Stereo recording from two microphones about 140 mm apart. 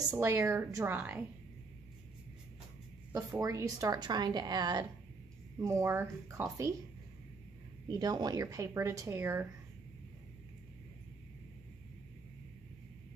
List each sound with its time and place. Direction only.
0.1 s speech: 15° right (ahead or behind)
3.1 s a woman's voice: 25° right (ahead or behind)
5.6 s a woman's voice: 20° right (ahead or behind)
7.9 s a woman's voice: 30° right (ahead or behind)